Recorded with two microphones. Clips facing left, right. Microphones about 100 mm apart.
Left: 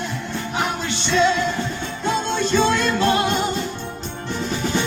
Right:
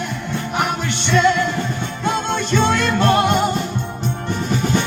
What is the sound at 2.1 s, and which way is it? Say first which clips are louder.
Music: even; 60° right (ahead or behind).